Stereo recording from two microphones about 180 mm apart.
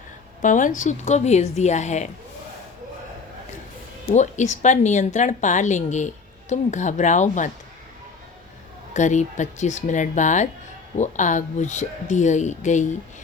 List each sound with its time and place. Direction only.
0.4 s speech: 45° left (ahead or behind)
4.1 s speech: 40° left (ahead or behind)
8.9 s speech: 40° left (ahead or behind)